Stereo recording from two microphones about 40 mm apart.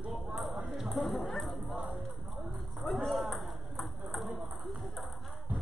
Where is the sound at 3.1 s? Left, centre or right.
Centre.